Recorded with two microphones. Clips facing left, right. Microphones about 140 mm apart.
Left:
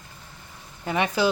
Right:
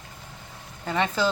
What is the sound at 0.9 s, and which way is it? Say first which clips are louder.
Speech: left 2 dB; 15° left (ahead or behind).